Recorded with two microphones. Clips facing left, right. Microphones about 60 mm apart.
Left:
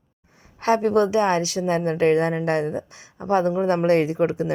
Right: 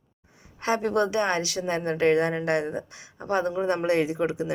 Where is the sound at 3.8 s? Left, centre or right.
Left.